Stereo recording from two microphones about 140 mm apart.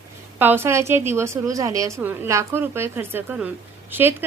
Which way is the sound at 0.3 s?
15° right (ahead or behind).